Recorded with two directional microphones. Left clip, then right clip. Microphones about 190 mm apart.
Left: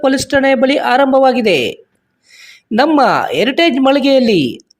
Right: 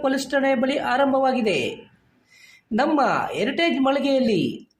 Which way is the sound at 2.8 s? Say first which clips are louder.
Left 9 dB; 45° left (ahead or behind).